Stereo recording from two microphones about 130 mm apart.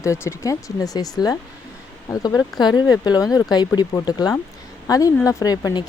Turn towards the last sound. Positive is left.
turn(degrees=30)  # may be behind; listen again after turning